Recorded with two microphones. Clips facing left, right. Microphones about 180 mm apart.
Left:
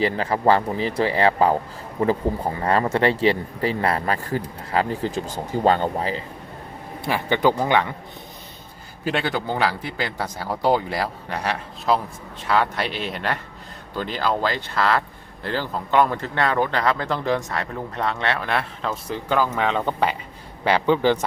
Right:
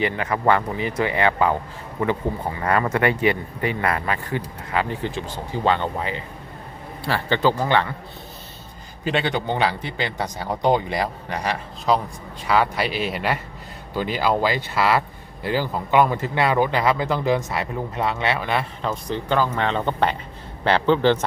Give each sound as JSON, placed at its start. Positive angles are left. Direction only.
{"t": 0.0, "sound": "speech", "side_deg": 30}
{"t": 7.0, "sound": "a man's voice", "side_deg": 15}
{"t": 9.0, "sound": "a man's voice", "side_deg": 5}